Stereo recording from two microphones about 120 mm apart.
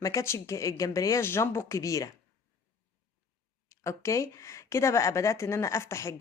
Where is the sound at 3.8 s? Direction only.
25° left (ahead or behind).